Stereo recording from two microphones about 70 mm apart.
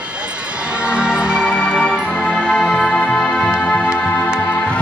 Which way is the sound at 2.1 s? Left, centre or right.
Centre.